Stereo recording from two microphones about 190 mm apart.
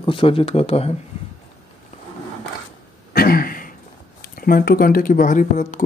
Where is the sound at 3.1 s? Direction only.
50° left (ahead or behind).